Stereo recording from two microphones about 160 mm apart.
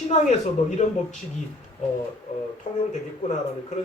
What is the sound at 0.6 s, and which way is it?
Speech, 40° left (ahead or behind).